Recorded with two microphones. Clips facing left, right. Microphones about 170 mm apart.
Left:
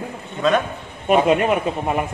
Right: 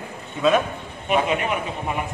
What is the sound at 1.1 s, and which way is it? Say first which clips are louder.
Speech: left 6 dB; 45° left (ahead or behind).